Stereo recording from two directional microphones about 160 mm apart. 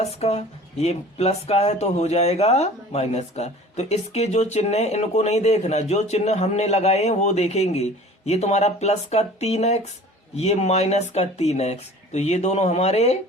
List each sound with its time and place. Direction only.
0.0 s speech: 40° left (ahead or behind)